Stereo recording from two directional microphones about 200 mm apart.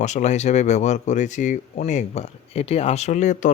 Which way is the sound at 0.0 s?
35° left (ahead or behind).